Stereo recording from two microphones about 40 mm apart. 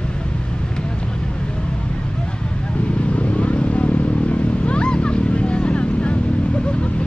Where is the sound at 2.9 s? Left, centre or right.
Left.